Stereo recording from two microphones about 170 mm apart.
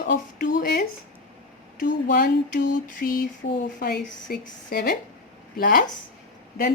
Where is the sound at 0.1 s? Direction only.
55° left (ahead or behind).